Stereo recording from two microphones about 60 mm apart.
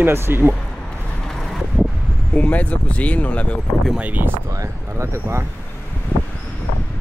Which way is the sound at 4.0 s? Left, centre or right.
Right.